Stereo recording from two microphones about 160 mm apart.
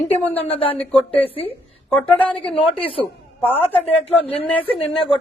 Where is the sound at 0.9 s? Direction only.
10° left (ahead or behind).